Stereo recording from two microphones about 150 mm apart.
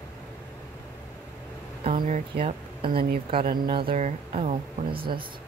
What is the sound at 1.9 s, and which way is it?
Speech, 65° right (ahead or behind).